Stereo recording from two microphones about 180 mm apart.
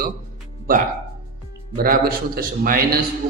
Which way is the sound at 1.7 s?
55° right (ahead or behind).